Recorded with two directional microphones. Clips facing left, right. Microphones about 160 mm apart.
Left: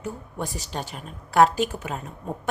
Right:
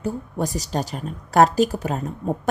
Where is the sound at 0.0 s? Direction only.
40° right (ahead or behind).